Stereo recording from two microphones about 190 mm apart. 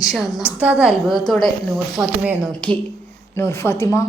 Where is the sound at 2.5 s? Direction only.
5° left (ahead or behind).